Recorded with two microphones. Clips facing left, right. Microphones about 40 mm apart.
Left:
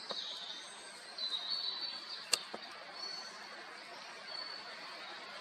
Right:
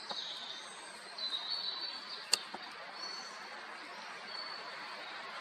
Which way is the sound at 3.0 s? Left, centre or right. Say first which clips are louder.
Right 2 dB; right.